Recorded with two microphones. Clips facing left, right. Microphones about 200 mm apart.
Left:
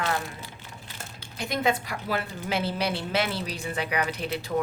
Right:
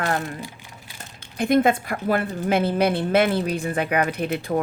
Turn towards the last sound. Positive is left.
turn(degrees=-55)  # may be behind; listen again after turning